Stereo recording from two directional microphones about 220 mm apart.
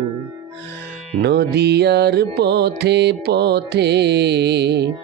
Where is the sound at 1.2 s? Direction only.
50° right (ahead or behind).